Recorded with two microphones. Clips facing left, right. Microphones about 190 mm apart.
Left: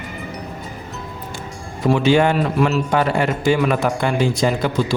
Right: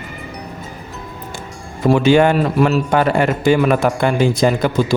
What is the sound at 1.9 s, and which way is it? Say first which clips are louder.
Speech: right 3 dB; 50° right (ahead or behind).